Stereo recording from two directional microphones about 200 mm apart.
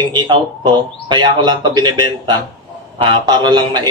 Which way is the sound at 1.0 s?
20° right (ahead or behind).